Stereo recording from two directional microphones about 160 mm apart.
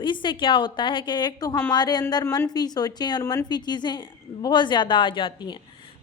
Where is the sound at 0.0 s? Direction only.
30° left (ahead or behind).